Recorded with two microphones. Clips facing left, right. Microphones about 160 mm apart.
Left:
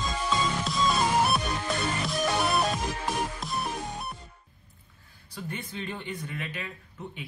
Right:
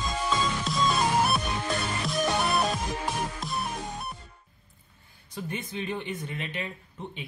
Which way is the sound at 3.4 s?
Centre (ahead or behind).